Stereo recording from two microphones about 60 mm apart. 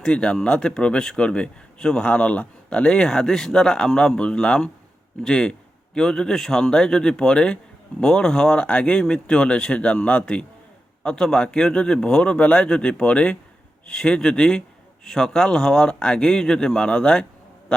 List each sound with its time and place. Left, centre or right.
0.0 s speech: centre